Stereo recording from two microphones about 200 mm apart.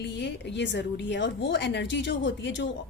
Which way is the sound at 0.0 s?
60° left (ahead or behind).